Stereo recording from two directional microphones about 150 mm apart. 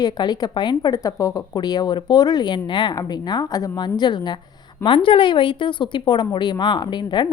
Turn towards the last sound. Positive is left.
turn(degrees=30)  # may be behind; listen again after turning